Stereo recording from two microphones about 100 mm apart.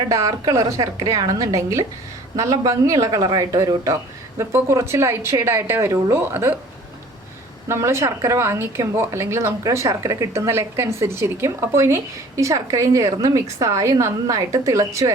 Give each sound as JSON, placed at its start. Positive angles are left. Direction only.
{"t": 0.1, "sound": "a woman's voice", "side_deg": -35}
{"t": 7.7, "sound": "a woman's voice", "side_deg": -30}